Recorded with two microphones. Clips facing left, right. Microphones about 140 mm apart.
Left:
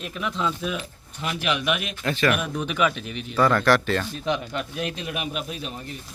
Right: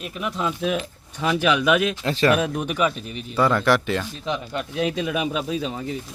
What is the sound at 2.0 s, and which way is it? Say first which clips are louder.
Speech: right 3 dB; 30° right (ahead or behind).